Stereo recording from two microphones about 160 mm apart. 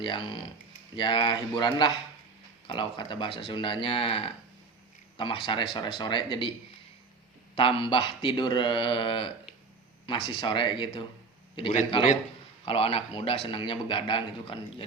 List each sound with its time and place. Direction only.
0.0 s a man's voice: 30° left (ahead or behind)
7.5 s a man's voice: 35° left (ahead or behind)